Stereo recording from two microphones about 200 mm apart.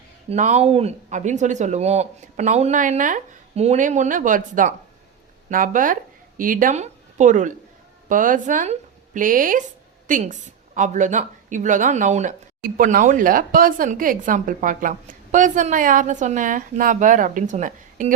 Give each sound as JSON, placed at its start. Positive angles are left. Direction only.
{"t": 0.3, "sound": "a woman's voice", "side_deg": -35}